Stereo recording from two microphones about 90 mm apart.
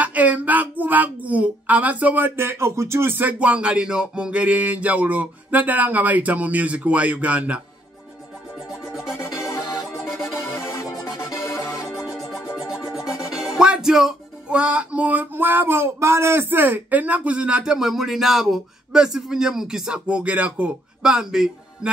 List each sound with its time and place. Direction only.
0.0 s speech: 15° right (ahead or behind)
8.9 s music: 5° right (ahead or behind)
9.4 s music: 40° left (ahead or behind)
9.8 s music: centre (ahead or behind)
10.5 s music: 35° left (ahead or behind)
12.5 s speech: 5° right (ahead or behind)